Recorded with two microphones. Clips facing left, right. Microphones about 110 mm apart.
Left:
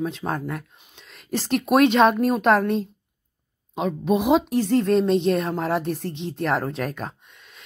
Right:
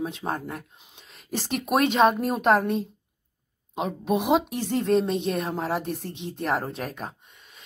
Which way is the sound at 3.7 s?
10° right (ahead or behind).